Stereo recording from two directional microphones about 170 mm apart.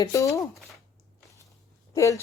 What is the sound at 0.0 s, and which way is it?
Speech, 20° left (ahead or behind).